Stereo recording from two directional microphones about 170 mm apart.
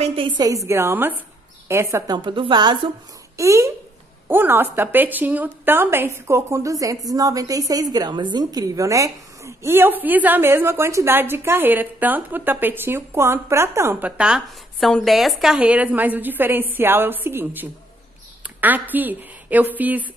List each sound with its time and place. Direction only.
0.0 s a woman's voice: 35° right (ahead or behind)
0.4 s a woman's voice: 20° right (ahead or behind)
3.3 s a woman's voice: 15° right (ahead or behind)